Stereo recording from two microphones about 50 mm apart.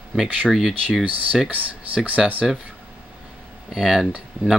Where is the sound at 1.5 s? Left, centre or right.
Right.